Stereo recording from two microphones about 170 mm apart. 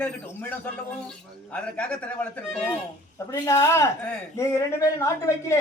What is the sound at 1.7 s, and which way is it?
Speech, 5° left (ahead or behind).